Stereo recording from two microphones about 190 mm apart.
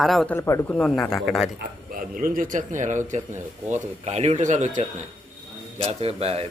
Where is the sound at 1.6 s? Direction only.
45° right (ahead or behind).